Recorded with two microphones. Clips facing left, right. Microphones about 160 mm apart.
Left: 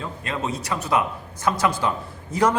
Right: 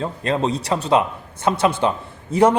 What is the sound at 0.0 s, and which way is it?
A man's voice, 35° right (ahead or behind).